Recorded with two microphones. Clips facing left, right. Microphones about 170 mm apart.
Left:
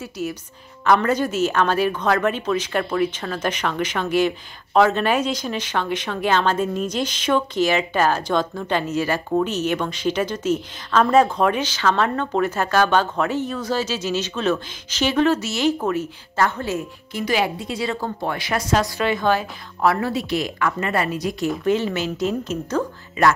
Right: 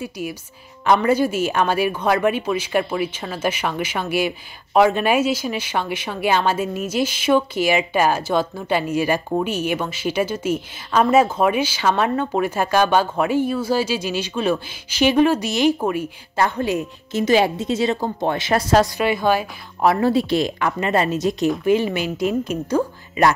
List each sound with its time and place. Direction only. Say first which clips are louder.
0.0 s speech: even; 10° right (ahead or behind); by 18.9 s 35° right (ahead or behind)
18.9 s speech: right 1 dB; 10° right (ahead or behind)
20.0 s a woman's voice: right 5 dB; 30° right (ahead or behind)
21.6 s speech: even; 15° right (ahead or behind)